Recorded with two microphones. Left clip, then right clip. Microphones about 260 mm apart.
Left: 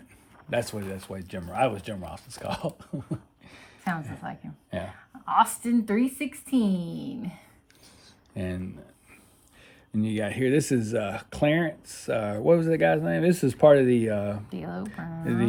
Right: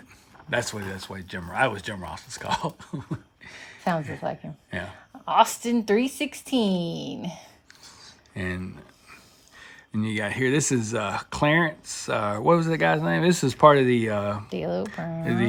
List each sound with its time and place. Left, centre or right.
0.5 s a woman's voice: centre
8.4 s speech: centre
14.5 s a woman's voice: right
15.2 s speech: centre